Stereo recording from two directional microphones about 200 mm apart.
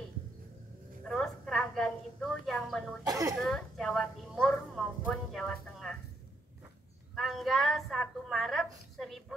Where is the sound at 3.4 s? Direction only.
5° left (ahead or behind).